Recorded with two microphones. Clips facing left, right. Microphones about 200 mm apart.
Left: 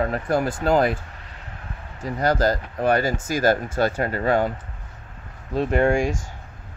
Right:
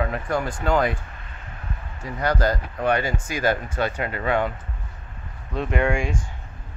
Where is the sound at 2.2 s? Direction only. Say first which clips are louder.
Left 2 dB; 40° left (ahead or behind).